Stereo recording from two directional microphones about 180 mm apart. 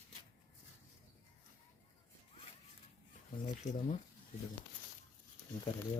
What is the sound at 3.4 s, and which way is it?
Speech, 40° left (ahead or behind).